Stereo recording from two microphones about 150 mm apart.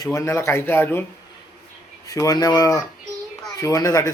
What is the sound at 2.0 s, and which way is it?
Speech, 20° left (ahead or behind).